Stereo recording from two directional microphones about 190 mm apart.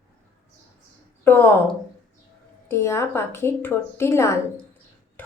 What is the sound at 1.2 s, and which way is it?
Speech, 10° left (ahead or behind).